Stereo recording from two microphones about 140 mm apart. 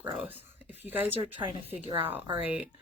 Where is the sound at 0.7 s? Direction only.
15° right (ahead or behind).